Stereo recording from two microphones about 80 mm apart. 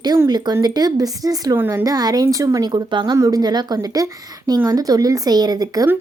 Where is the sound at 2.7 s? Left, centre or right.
Right.